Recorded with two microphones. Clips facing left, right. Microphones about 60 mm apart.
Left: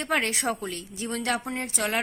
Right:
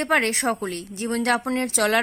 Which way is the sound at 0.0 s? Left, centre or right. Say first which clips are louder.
Right 5 dB; right.